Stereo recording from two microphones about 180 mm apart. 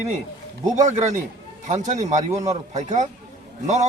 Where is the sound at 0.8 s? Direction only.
40° right (ahead or behind).